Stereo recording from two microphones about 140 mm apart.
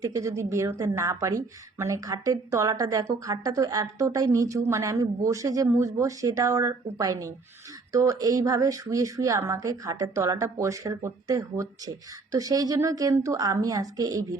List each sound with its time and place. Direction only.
0.0 s speech: 25° right (ahead or behind)